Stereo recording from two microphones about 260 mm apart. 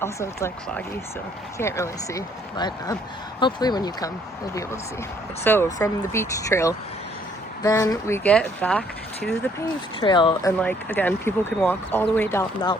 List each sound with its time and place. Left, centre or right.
0.0 s speech: centre
5.4 s speech: centre
10.0 s speech: centre
10.6 s speech: centre